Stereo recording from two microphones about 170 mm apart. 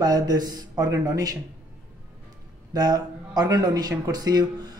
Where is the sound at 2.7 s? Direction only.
25° right (ahead or behind).